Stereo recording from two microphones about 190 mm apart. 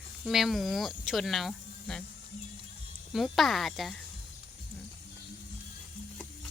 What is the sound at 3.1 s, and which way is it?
Speech, centre (ahead or behind).